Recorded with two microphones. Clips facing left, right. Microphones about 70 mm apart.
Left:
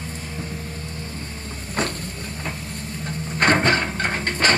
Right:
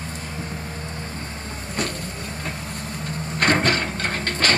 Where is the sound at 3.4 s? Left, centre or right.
Left.